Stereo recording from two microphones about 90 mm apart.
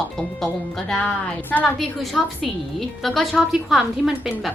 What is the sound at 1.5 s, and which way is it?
A woman's voice, 5° left (ahead or behind).